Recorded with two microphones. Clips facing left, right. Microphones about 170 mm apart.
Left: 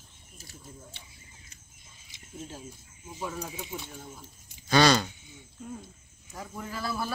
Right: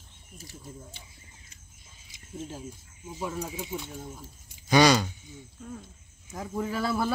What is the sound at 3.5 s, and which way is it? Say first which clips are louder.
Speech: right 4 dB; 15° right (ahead or behind).